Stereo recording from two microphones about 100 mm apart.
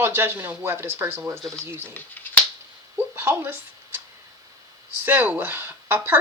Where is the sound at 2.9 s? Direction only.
25° right (ahead or behind).